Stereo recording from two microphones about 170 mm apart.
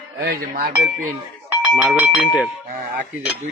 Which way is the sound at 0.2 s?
60° right (ahead or behind).